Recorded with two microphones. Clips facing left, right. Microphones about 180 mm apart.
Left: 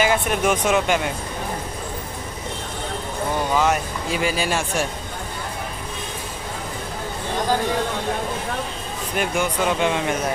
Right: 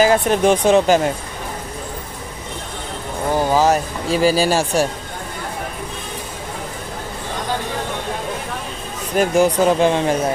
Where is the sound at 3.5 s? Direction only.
35° right (ahead or behind).